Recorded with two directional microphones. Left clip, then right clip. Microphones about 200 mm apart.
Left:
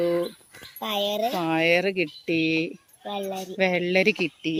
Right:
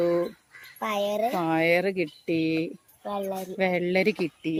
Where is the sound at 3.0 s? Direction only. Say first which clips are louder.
Even; 20° right (ahead or behind).